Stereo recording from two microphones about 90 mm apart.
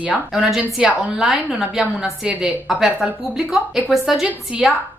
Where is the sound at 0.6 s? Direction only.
15° right (ahead or behind).